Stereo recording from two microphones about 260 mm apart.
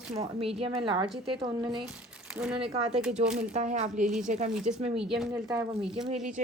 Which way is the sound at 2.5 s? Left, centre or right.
Right.